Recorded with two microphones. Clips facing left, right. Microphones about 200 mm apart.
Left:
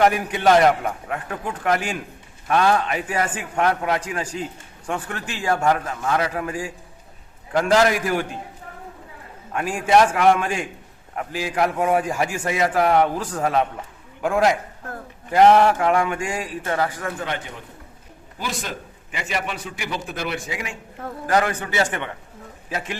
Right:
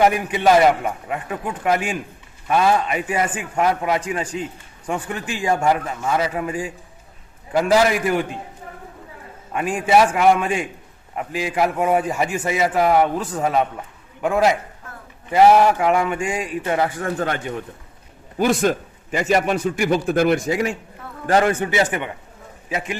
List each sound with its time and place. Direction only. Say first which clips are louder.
0.0 s a man's voice: right 1 dB; centre (ahead or behind)
9.5 s a man's voice: right 1 dB; 5° right (ahead or behind)
16.6 s a man's voice: right 2 dB; 20° right (ahead or behind)
17.2 s a man's voice: right 6 dB; 50° right (ahead or behind)
21.2 s a man's voice: right 4 dB; 25° right (ahead or behind)